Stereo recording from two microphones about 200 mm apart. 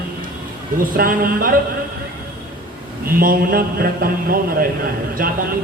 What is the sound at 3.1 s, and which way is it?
A man's voice, 45° right (ahead or behind).